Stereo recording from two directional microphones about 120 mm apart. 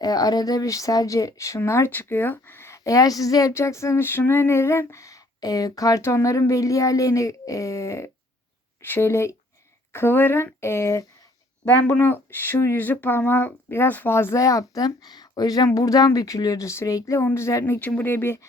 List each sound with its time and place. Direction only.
0.0 s speech: 35° left (ahead or behind)
17.7 s speech: 15° left (ahead or behind)